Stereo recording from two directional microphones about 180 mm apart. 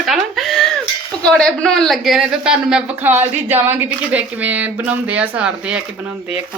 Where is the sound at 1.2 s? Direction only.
5° left (ahead or behind).